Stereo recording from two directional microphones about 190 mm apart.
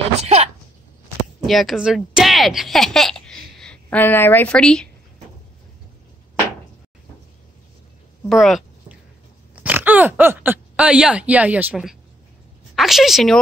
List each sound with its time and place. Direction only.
0.2 s a sound: 35° right (ahead or behind)
1.4 s speech: centre (ahead or behind)
8.3 s a woman's voice: centre (ahead or behind)